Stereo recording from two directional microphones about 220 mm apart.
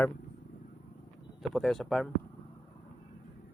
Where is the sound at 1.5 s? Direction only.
Centre (ahead or behind).